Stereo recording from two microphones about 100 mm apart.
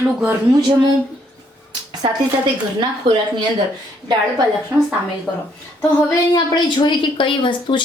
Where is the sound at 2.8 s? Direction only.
50° right (ahead or behind).